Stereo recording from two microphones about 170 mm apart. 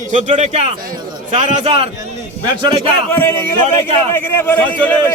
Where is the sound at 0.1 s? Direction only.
45° right (ahead or behind).